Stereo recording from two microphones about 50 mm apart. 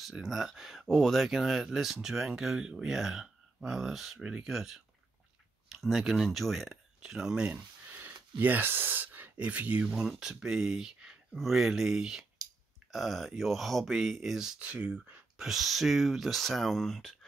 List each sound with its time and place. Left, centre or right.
0.2 s speech: centre
7.0 s speech: centre
7.5 s a sound: right
9.4 s speech: right
10.1 s speech: centre
14.6 s speech: right
15.3 s speech: centre